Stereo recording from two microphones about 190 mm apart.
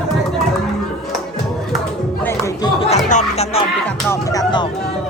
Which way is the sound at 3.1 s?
35° left (ahead or behind).